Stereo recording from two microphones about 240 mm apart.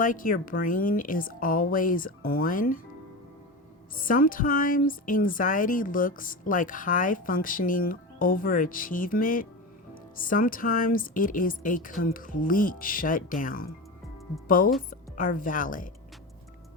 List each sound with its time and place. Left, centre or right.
0.0 s speech: left
3.9 s a woman's voice: left